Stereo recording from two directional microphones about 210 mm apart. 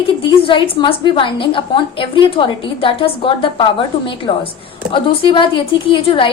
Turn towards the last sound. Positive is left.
turn(degrees=25)  # may be behind; listen again after turning